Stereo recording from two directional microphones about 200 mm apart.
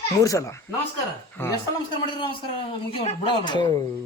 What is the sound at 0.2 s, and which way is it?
Speech, 15° left (ahead or behind).